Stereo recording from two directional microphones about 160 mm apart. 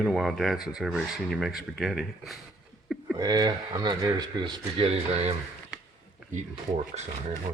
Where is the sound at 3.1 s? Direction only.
25° right (ahead or behind); by 5.3 s 40° right (ahead or behind).